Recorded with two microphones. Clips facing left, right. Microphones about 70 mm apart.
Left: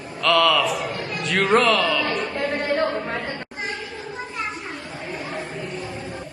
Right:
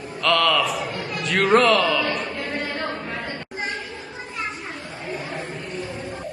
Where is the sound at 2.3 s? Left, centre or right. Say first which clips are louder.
Left 4 dB; left.